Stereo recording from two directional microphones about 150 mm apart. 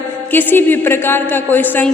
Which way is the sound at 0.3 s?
15° left (ahead or behind).